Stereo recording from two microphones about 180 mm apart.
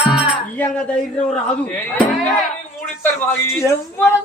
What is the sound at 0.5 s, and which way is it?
A man's voice, 10° left (ahead or behind).